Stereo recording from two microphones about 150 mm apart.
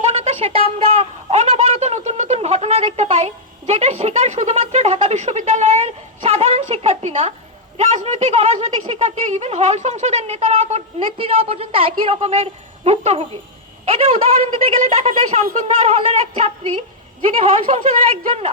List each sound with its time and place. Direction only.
0.0 s a woman's voice: 40° right (ahead or behind)